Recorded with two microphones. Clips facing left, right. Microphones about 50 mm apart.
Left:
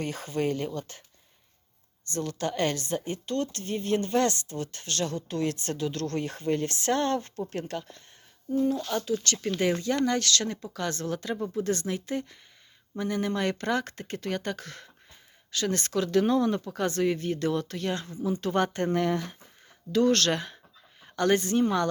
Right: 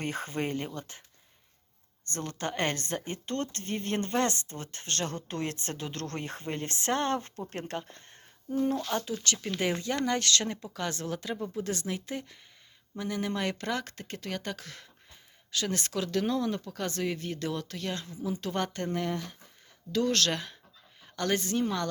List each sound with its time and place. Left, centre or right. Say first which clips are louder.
0.0 s speech: left 3 dB; right
2.0 s speech: left 4 dB; right
4.1 s speech: left 3 dB; right
8.4 s speech: left 3 dB; right
8.8 s speech: left 2 dB; right
9.2 s speech: left 4 dB; centre
16.6 s speech: left 5 dB; centre
16.8 s speech: left 7 dB; centre
18.9 s speech: left 6 dB; left
19.9 s speech: left 5 dB; centre